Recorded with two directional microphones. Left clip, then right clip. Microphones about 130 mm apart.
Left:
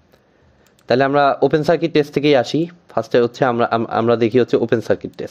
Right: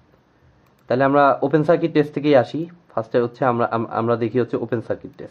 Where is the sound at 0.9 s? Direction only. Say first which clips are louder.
Left 1 dB; 45° left (ahead or behind).